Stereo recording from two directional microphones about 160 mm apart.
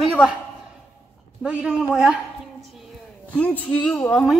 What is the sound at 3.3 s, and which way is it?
A woman's voice, 10° left (ahead or behind).